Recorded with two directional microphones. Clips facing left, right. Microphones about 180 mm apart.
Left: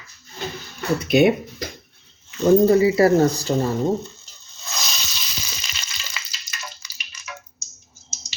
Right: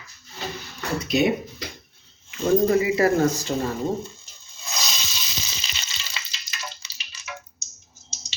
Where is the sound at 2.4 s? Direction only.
35° left (ahead or behind).